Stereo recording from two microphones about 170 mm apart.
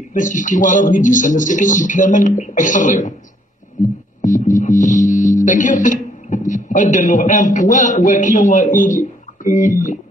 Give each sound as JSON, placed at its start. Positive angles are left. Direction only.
{"t": 0.1, "sound": "speech", "side_deg": 50}
{"t": 4.2, "sound": "music", "side_deg": 50}